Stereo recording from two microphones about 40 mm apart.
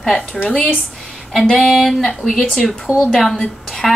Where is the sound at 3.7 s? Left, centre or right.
Centre.